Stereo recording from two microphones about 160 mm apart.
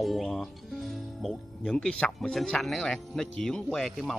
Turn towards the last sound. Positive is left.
turn(degrees=0)  # may be behind; listen again after turning